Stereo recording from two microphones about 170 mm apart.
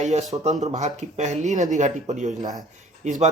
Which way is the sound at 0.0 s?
40° right (ahead or behind).